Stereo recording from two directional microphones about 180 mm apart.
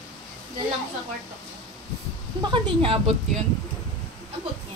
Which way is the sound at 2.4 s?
30° right (ahead or behind).